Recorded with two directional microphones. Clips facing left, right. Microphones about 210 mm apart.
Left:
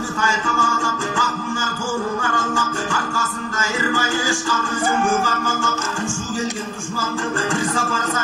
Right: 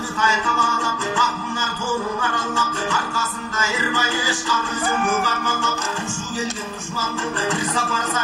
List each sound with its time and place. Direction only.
0.5 s music: 45° left (ahead or behind)